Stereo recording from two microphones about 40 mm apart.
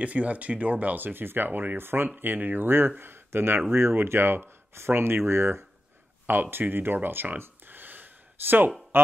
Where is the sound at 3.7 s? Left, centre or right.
Right.